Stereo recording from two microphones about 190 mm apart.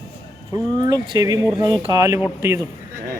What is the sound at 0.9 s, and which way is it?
A man's voice, 20° right (ahead or behind).